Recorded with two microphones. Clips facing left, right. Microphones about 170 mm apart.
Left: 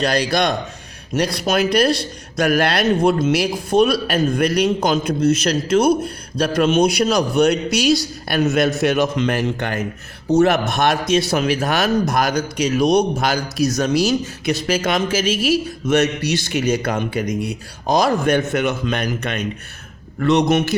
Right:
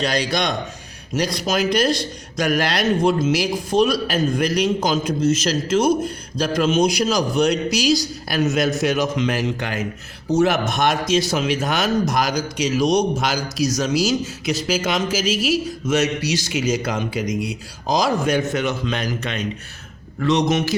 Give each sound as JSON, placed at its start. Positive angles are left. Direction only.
{"t": 0.0, "sound": "speech", "side_deg": 60}